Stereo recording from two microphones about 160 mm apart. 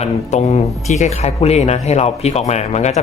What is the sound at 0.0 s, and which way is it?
Speech, 45° left (ahead or behind).